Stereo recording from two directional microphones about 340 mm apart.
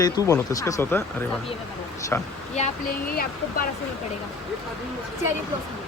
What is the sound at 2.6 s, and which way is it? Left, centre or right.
Speech, left.